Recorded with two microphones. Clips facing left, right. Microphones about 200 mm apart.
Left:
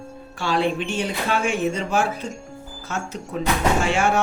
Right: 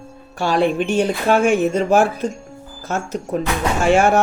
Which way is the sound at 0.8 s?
50° right (ahead or behind).